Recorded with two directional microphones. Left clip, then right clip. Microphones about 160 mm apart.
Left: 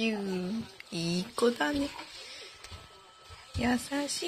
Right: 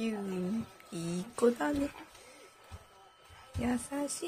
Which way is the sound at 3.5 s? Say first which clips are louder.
Left 4 dB; centre (ahead or behind).